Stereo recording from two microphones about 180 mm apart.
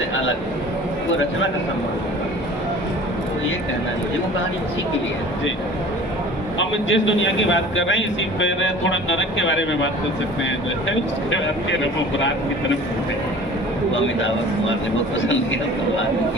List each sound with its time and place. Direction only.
6.6 s a man's voice: 90° left